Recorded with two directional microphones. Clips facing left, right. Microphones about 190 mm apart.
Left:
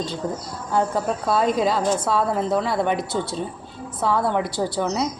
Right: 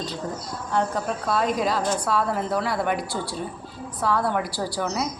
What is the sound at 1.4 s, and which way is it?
Speech, centre (ahead or behind).